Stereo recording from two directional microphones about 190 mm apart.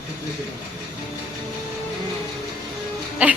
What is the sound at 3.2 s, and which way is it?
Speech, 5° right (ahead or behind).